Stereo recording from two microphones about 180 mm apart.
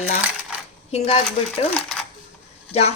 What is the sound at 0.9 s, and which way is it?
Speech, 35° left (ahead or behind).